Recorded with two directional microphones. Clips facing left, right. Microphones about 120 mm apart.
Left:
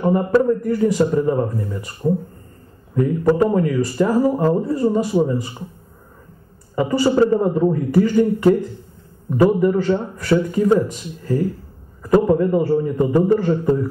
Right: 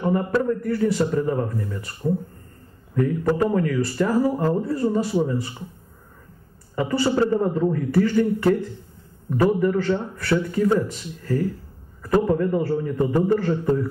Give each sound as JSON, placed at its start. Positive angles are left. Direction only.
{"t": 0.0, "sound": "a man's voice", "side_deg": 25}
{"t": 3.0, "sound": "a man's voice", "side_deg": 20}
{"t": 6.7, "sound": "a man's voice", "side_deg": 20}